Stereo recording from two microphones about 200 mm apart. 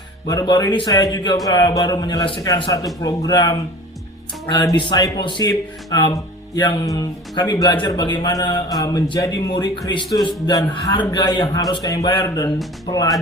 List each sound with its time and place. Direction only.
0.3 s speech: 20° left (ahead or behind)